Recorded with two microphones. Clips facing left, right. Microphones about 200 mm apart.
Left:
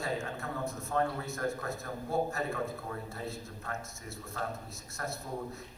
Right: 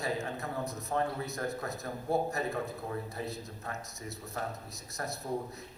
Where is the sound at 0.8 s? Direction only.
20° right (ahead or behind).